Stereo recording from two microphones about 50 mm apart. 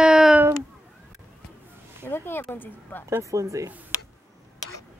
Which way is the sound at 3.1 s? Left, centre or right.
Right.